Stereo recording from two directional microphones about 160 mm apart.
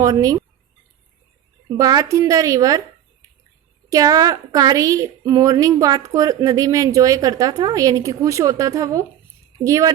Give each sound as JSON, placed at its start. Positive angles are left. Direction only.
{"t": 0.0, "sound": "speech", "side_deg": -20}
{"t": 1.7, "sound": "a woman's voice", "side_deg": -25}
{"t": 3.8, "sound": "a woman's voice", "side_deg": -20}